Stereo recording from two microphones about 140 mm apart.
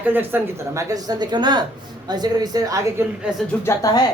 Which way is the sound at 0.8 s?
25° right (ahead or behind).